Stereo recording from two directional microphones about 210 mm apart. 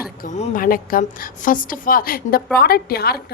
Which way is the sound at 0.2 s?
35° left (ahead or behind).